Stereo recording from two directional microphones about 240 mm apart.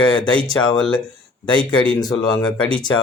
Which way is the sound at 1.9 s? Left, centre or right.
Centre.